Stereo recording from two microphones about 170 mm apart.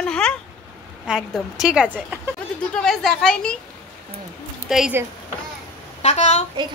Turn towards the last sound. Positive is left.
turn(degrees=40)  # may be behind; listen again after turning